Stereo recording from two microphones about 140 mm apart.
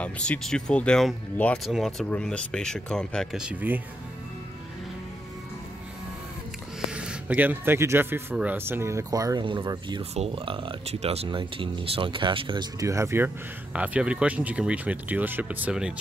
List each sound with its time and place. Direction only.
0.0 s speech: 5° left (ahead or behind); by 3.8 s 10° right (ahead or behind)
6.9 s speech: 5° right (ahead or behind); by 9.4 s 25° right (ahead or behind)
9.4 s speech: 35° right (ahead or behind)
12.8 s speech: 20° right (ahead or behind)